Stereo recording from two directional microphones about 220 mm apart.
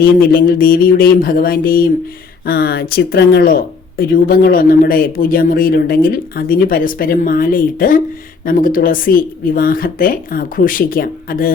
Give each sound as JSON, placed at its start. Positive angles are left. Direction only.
{"t": 0.0, "sound": "speech", "side_deg": 40}